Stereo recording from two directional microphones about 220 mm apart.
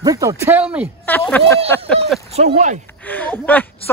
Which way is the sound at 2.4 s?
30° right (ahead or behind).